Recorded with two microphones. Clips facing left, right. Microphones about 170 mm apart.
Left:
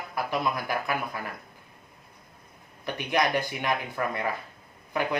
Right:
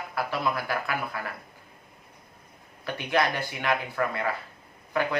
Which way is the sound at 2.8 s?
15° left (ahead or behind).